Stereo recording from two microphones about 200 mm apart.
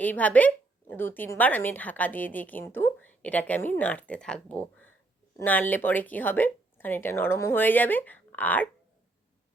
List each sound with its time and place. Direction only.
0.0 s speech: 10° left (ahead or behind)